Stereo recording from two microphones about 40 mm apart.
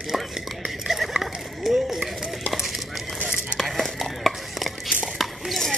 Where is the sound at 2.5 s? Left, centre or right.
Centre.